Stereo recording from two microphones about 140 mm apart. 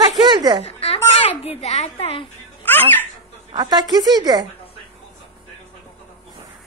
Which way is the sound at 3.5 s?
30° right (ahead or behind).